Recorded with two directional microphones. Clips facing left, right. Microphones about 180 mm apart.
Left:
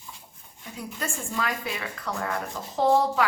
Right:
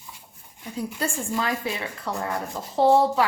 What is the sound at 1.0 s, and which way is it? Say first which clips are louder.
A woman's voice: right 3 dB; 30° right (ahead or behind).